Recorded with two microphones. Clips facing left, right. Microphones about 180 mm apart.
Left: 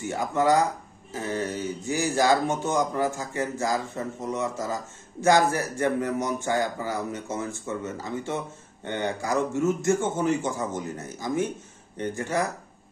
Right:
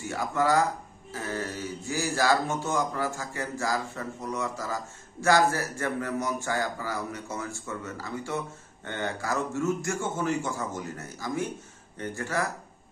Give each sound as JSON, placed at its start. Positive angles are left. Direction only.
{"t": 0.0, "sound": "speech", "side_deg": 20}